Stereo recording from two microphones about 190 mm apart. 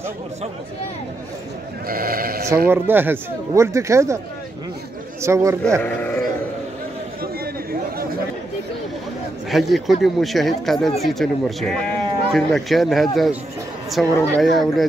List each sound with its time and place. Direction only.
1.9 s speech: 50° right (ahead or behind)
2.7 s speech: 10° right (ahead or behind)
5.2 s speech: 15° right (ahead or behind)
5.8 s speech: 10° left (ahead or behind)
9.5 s speech: centre (ahead or behind)